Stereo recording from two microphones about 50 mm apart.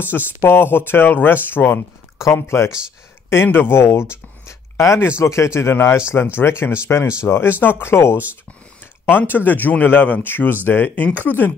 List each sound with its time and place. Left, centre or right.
0.4 s speech: left
2.3 s speech: left
5.2 s speech: left
9.1 s speech: left